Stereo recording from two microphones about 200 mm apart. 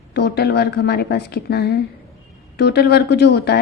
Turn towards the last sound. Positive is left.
turn(degrees=55)  # may be behind; listen again after turning